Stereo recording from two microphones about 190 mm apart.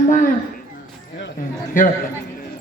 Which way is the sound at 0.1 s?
45° left (ahead or behind).